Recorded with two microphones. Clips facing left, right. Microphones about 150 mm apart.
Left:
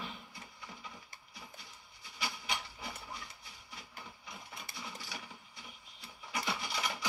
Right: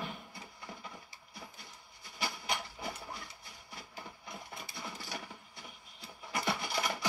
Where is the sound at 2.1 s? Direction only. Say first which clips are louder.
Right 3 dB; 45° right (ahead or behind).